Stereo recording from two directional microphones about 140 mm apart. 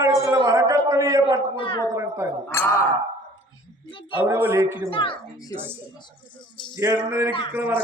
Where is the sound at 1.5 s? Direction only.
40° left (ahead or behind).